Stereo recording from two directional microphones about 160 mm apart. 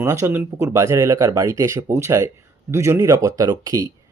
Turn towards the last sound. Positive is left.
turn(degrees=-20)  # may be behind; listen again after turning